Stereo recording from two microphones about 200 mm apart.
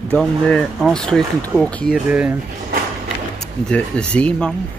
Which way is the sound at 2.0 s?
5° right (ahead or behind).